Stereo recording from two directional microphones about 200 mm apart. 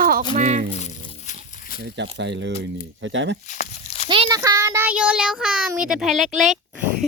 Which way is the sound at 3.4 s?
35° left (ahead or behind).